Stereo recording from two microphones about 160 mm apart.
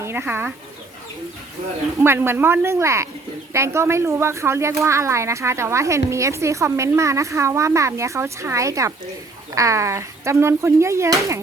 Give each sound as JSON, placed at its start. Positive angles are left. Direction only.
{"t": 0.0, "sound": "speech", "side_deg": -15}
{"t": 2.0, "sound": "speech", "side_deg": -15}